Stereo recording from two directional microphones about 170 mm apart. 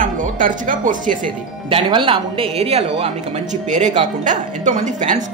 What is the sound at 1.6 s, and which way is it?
A woman's voice, 30° right (ahead or behind).